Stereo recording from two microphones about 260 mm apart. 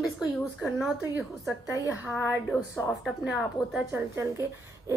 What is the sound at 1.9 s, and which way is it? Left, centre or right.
Speech, centre.